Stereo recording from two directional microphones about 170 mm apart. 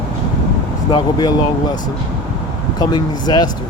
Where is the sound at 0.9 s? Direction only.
25° left (ahead or behind).